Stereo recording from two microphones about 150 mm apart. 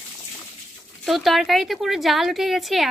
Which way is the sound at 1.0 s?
Centre (ahead or behind).